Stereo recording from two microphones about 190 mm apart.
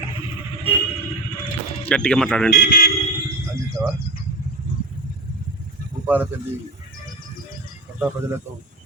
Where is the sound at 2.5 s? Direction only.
55° left (ahead or behind).